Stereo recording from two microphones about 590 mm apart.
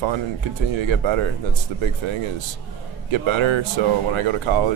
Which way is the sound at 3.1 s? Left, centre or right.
Right.